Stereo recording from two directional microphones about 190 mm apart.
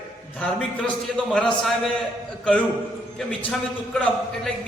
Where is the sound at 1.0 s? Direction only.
5° left (ahead or behind).